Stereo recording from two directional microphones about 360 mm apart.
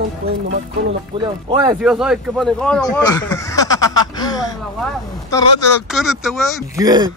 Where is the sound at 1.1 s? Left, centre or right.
Centre.